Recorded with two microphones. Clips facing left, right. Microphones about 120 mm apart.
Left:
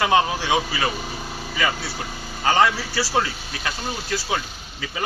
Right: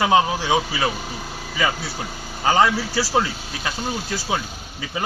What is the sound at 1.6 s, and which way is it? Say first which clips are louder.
A man's voice: right 2 dB; centre (ahead or behind).